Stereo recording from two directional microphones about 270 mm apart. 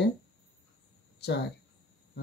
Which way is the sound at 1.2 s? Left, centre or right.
Left.